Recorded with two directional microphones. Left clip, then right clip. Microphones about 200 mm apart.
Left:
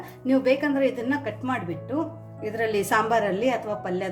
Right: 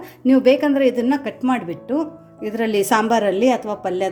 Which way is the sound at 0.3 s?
45° right (ahead or behind).